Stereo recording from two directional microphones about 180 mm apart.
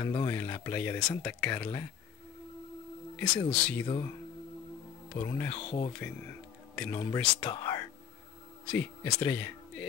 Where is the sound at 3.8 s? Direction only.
20° left (ahead or behind).